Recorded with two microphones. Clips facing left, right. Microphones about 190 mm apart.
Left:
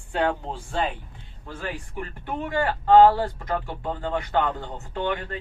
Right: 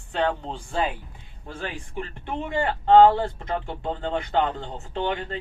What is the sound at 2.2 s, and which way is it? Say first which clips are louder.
Speech: left 1 dB; 25° right (ahead or behind).